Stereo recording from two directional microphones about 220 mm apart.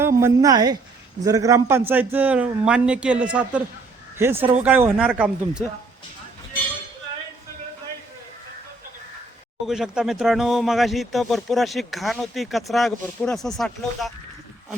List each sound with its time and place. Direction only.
0.2 s a man's voice: 15° right (ahead or behind)
9.6 s speech: centre (ahead or behind)